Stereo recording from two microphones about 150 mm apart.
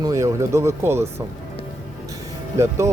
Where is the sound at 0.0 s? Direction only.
20° right (ahead or behind).